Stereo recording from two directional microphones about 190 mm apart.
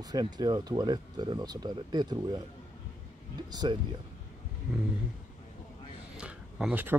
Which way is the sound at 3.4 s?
20° right (ahead or behind).